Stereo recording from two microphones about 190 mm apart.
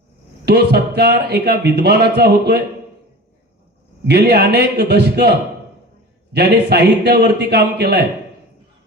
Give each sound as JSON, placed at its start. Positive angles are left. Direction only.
{"t": 0.4, "sound": "speech", "side_deg": -60}
{"t": 4.0, "sound": "speech", "side_deg": -60}
{"t": 6.3, "sound": "speech", "side_deg": -60}